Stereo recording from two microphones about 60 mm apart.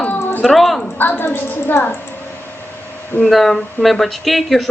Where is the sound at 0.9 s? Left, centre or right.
Left.